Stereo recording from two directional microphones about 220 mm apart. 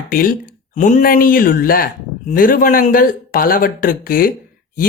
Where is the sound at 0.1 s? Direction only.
40° left (ahead or behind).